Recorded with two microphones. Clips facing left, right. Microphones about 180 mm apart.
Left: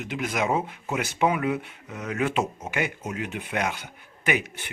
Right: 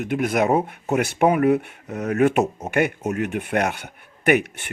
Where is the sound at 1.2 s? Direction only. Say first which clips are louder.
Right 7 dB; 45° right (ahead or behind); by 4.7 s 60° right (ahead or behind).